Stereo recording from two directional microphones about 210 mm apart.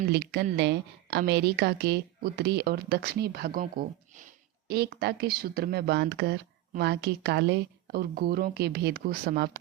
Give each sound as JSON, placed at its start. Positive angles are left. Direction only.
{"t": 0.1, "sound": "speech", "side_deg": -50}